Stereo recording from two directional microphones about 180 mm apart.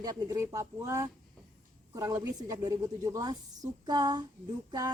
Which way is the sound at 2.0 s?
20° right (ahead or behind).